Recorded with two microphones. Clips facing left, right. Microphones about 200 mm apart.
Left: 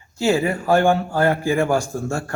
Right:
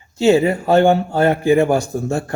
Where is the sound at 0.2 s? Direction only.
20° right (ahead or behind).